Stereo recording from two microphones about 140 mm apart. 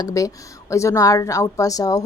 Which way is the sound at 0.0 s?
25° left (ahead or behind).